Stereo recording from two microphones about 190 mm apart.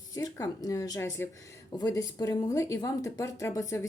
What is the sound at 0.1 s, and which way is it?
A woman's voice, 20° left (ahead or behind).